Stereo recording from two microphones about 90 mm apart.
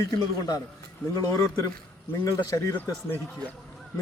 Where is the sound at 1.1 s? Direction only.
40° left (ahead or behind).